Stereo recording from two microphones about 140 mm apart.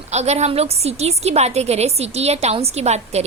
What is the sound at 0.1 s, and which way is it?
A woman's voice, 50° right (ahead or behind).